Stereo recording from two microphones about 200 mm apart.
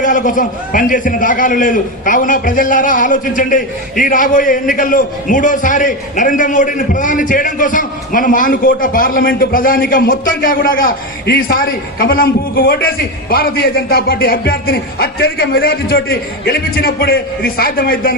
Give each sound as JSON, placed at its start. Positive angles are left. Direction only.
{"t": 0.0, "sound": "a man's voice", "side_deg": 40}